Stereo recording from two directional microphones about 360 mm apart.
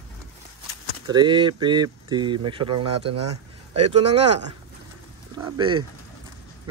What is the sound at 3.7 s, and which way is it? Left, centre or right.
Speech, centre.